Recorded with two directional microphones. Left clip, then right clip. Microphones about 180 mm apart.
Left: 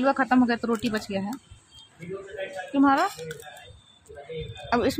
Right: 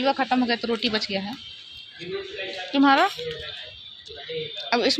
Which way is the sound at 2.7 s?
Centre (ahead or behind).